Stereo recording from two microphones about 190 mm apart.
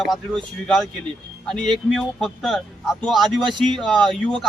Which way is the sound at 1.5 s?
Centre (ahead or behind).